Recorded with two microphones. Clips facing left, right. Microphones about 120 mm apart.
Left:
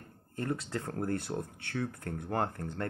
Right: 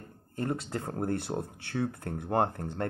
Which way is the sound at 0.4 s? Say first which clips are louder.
Right 2 dB; 25° right (ahead or behind).